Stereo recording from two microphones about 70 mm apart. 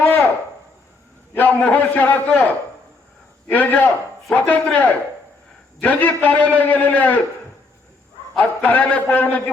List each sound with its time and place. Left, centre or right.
1.3 s a man's voice: left
3.5 s a man's voice: left
8.4 s a man's voice: left